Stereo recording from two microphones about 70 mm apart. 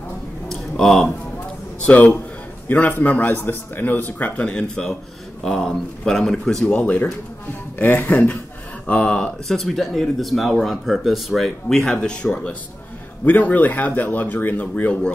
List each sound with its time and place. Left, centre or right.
0.5 s a sound: centre
1.9 s speech: left
5.4 s speech: centre
6.7 s speech: left